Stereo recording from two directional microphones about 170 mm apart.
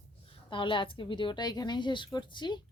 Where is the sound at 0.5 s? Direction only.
30° left (ahead or behind).